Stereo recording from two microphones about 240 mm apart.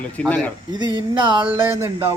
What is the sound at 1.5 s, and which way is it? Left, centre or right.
Speech, centre.